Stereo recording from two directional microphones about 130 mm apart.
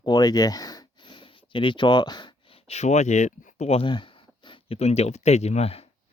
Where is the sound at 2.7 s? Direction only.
60° left (ahead or behind).